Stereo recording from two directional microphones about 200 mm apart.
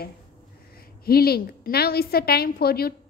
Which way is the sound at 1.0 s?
50° left (ahead or behind).